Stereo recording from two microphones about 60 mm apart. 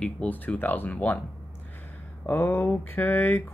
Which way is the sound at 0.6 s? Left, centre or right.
Left.